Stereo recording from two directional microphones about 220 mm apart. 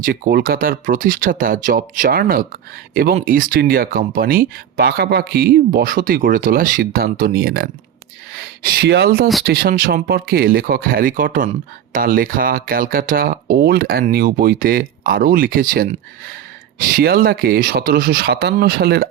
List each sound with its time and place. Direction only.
0.0 s speech: 45° right (ahead or behind)